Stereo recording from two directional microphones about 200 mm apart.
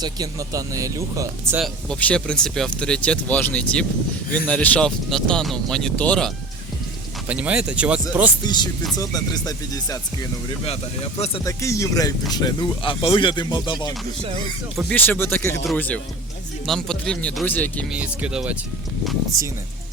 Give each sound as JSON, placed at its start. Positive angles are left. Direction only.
{"t": 0.0, "sound": "speech", "side_deg": -20}
{"t": 1.6, "sound": "speech", "side_deg": 5}
{"t": 8.4, "sound": "speech", "side_deg": 20}
{"t": 10.6, "sound": "speech", "side_deg": 30}
{"t": 11.4, "sound": "speech", "side_deg": 15}
{"t": 14.2, "sound": "music", "side_deg": -30}
{"t": 14.8, "sound": "speech", "side_deg": 5}
{"t": 17.9, "sound": "speech", "side_deg": -5}